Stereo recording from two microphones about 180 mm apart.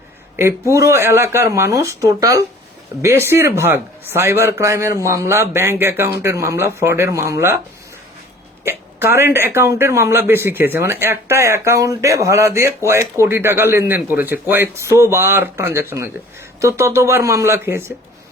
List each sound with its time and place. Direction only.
0.7 s a man's voice: 15° right (ahead or behind)
8.6 s a man's voice: 15° right (ahead or behind)